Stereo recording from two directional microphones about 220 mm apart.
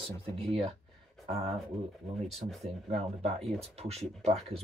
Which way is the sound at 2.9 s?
25° right (ahead or behind).